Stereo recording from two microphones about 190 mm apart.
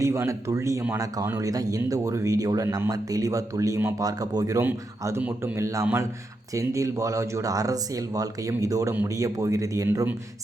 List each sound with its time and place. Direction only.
0.0 s speech: 15° right (ahead or behind)